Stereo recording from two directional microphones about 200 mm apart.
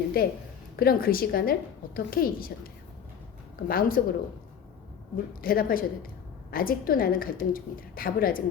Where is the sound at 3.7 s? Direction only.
45° left (ahead or behind).